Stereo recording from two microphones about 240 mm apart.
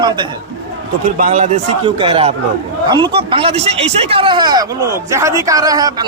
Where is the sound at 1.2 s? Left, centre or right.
Right.